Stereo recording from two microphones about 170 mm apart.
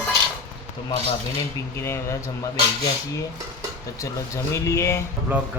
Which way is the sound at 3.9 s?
20° left (ahead or behind).